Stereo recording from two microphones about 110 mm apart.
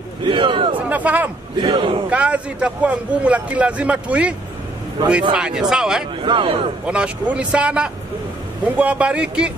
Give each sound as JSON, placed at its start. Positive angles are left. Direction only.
{"t": 0.2, "sound": "a sound", "side_deg": -50}
{"t": 0.7, "sound": "a sound", "side_deg": -15}
{"t": 1.6, "sound": "speech", "side_deg": -45}
{"t": 2.0, "sound": "a man's voice", "side_deg": -10}
{"t": 6.2, "sound": "speech", "side_deg": -55}
{"t": 6.9, "sound": "a man's voice", "side_deg": -10}